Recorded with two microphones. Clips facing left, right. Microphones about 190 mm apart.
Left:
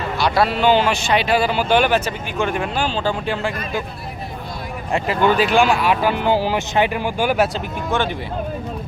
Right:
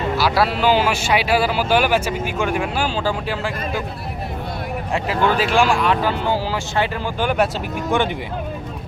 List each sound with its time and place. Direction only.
0.2 s a man's voice: 5° right (ahead or behind)
4.9 s speech: centre (ahead or behind)
7.9 s a man's voice: 15° right (ahead or behind)